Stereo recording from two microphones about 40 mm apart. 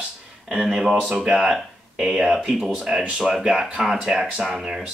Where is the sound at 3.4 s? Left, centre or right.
Centre.